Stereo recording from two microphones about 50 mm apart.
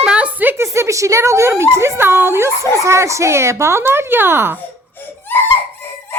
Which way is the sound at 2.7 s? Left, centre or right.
Right.